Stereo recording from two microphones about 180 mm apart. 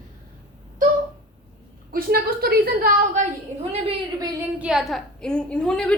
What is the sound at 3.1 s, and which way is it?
Speech, 35° right (ahead or behind).